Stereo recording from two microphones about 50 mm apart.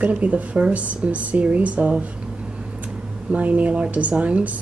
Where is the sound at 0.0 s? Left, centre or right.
Right.